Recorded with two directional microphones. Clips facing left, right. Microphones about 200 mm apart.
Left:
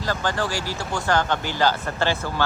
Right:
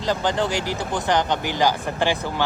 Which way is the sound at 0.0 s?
20° right (ahead or behind).